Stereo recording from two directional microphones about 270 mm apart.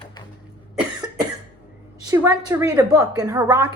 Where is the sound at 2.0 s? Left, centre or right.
Centre.